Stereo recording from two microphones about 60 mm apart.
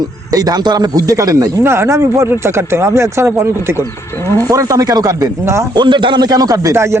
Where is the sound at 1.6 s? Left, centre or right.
Right.